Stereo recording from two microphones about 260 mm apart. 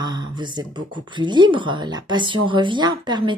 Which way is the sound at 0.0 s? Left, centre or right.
Centre.